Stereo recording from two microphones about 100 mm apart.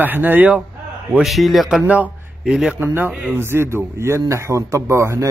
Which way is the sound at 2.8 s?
20° right (ahead or behind).